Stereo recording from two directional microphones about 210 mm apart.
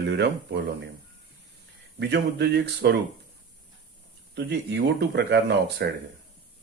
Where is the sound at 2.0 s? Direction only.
55° right (ahead or behind).